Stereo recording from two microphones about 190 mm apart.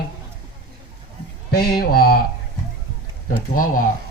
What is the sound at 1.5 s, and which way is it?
Speech, 55° left (ahead or behind).